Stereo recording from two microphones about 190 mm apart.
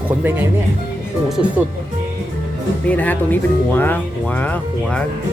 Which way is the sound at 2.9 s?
10° left (ahead or behind).